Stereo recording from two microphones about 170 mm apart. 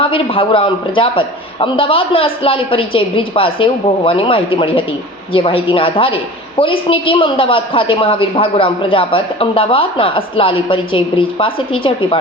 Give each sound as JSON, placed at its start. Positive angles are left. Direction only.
{"t": 0.0, "sound": "a woman's voice", "side_deg": 30}